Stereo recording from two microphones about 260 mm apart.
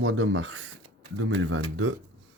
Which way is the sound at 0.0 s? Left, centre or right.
Right.